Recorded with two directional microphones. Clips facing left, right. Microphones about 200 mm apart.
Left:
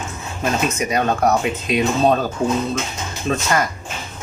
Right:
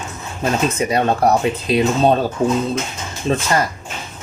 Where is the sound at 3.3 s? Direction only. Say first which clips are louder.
Right 2 dB; 30° right (ahead or behind).